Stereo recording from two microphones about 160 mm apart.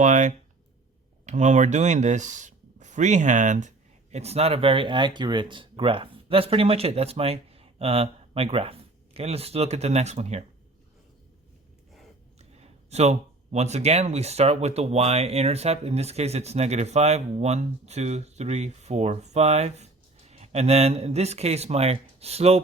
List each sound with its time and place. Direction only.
0.0 s speech: 50° right (ahead or behind)
12.4 s speech: 40° right (ahead or behind)